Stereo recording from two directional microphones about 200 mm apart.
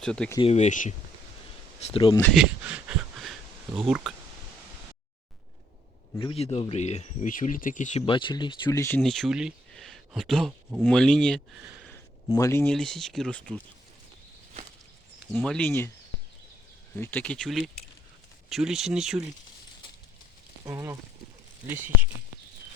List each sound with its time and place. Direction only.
0.0 s speech: 5° left (ahead or behind)
0.3 s speech: 30° left (ahead or behind)
1.9 s speech: 20° left (ahead or behind)
2.3 s a sound: 5° right (ahead or behind)
3.8 s speech: centre (ahead or behind)
6.3 s speech: 30° left (ahead or behind); by 9.0 s 15° left (ahead or behind)
9.0 s speech: centre (ahead or behind)
15.3 s speech: 5° left (ahead or behind)
16.9 s speech: 10° left (ahead or behind)
20.7 s speech: 15° right (ahead or behind)